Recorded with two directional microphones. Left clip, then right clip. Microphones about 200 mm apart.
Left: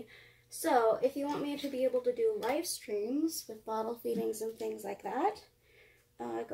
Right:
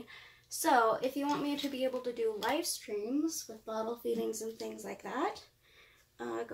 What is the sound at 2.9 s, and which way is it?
Speech, 5° right (ahead or behind).